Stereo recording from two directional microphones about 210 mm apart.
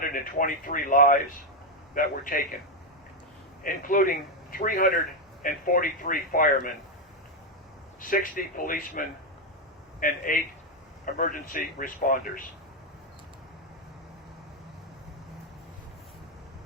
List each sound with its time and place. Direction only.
0.1 s speech: 40° left (ahead or behind)
3.6 s speech: 40° left (ahead or behind)
8.1 s speech: 40° left (ahead or behind)